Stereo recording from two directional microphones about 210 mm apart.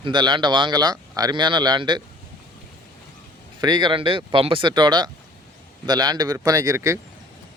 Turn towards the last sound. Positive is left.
turn(degrees=-15)  # may be behind; listen again after turning